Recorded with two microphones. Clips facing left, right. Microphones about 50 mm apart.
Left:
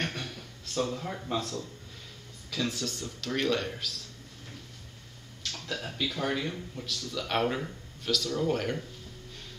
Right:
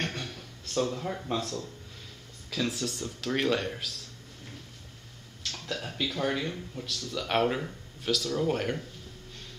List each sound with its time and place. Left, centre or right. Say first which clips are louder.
0.0 s a sound: even; centre
2.5 s speech: right 1 dB; centre
5.4 s speech: even; centre